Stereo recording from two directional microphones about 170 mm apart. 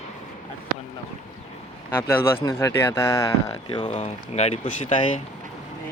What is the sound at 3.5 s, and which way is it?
Speech, 30° left (ahead or behind).